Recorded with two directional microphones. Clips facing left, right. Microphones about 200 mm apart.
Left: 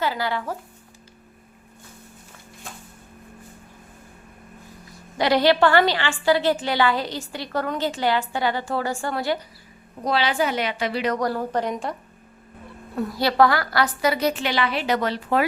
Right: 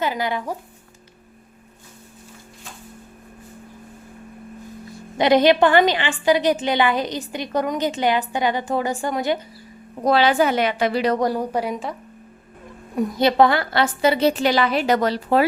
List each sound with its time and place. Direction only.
0.0 s a woman's voice: 20° right (ahead or behind)
5.1 s a woman's voice: 20° right (ahead or behind)
10.0 s a woman's voice: 50° right (ahead or behind)
11.0 s speech: 30° right (ahead or behind)
11.3 s a woman's voice: 15° right (ahead or behind)
13.0 s a woman's voice: 20° right (ahead or behind); by 15.4 s 35° right (ahead or behind)